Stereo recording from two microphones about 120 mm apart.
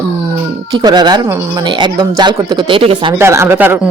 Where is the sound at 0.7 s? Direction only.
35° right (ahead or behind).